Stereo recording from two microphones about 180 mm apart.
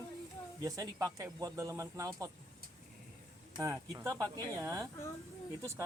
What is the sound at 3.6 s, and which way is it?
Speech, 20° right (ahead or behind).